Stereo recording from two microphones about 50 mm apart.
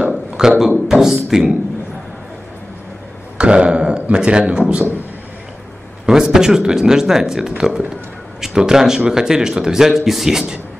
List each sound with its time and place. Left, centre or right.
0.1 s speech: centre
3.3 s speech: right
6.0 s speech: centre